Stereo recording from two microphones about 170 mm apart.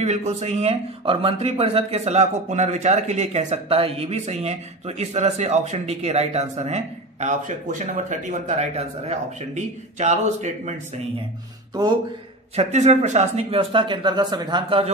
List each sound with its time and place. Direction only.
0.0 s a man's voice: 40° right (ahead or behind)
11.7 s speech: 25° right (ahead or behind)
12.5 s speech: 40° right (ahead or behind)